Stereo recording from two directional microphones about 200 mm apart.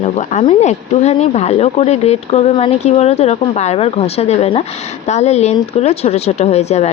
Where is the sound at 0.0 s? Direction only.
35° left (ahead or behind).